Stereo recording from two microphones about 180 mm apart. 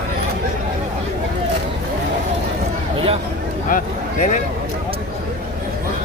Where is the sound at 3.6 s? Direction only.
45° left (ahead or behind).